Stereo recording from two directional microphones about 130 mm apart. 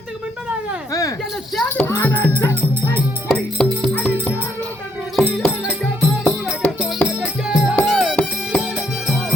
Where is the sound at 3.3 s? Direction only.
5° left (ahead or behind).